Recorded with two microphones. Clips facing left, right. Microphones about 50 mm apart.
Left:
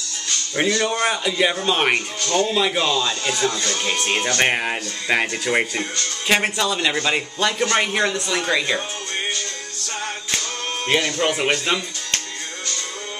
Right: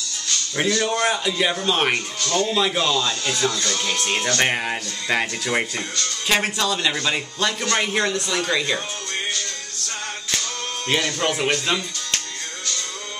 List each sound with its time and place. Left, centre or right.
0.6 s speech: centre
0.8 s speech: centre
10.9 s speech: centre